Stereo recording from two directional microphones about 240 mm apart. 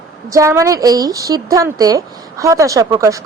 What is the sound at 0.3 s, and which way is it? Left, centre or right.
A woman's voice, centre.